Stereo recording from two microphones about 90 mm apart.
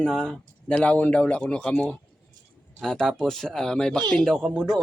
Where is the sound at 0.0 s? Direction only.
5° left (ahead or behind).